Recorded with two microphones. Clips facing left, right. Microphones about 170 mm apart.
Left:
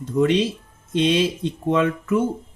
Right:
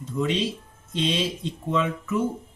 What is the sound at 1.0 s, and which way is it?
Speech, 65° left (ahead or behind).